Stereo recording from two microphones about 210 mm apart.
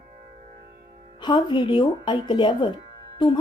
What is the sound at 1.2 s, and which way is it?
A woman's voice, 20° left (ahead or behind).